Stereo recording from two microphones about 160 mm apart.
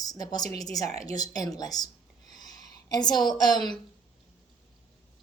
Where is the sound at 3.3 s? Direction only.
25° left (ahead or behind).